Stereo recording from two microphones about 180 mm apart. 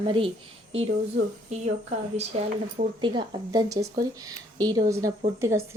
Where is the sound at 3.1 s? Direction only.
25° right (ahead or behind).